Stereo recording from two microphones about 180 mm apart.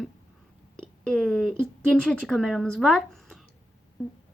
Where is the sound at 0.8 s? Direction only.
5° left (ahead or behind).